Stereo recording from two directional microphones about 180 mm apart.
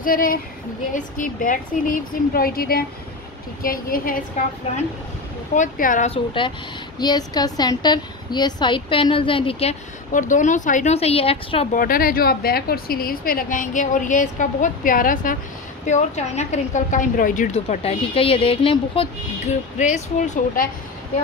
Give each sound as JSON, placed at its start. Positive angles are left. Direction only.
{"t": 0.0, "sound": "a woman's voice", "side_deg": 50}
{"t": 5.5, "sound": "a woman's voice", "side_deg": 45}
{"t": 6.0, "sound": "a woman's voice", "side_deg": 30}
{"t": 11.7, "sound": "a woman's voice", "side_deg": 50}